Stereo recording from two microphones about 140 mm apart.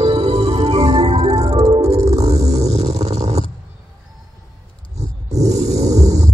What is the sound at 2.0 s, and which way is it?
Stomach rumble, 50° right (ahead or behind).